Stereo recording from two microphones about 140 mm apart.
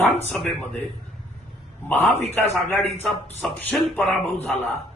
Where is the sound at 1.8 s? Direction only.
15° left (ahead or behind).